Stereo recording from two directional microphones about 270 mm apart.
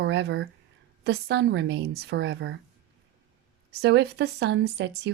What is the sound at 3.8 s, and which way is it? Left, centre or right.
Speech, right.